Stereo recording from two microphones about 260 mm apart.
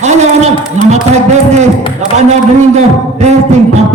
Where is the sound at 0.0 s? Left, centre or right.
Right.